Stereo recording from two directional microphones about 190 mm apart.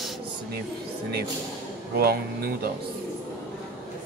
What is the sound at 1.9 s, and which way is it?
Speech, 55° right (ahead or behind).